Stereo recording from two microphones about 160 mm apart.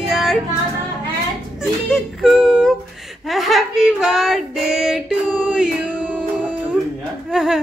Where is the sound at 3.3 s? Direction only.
Centre (ahead or behind).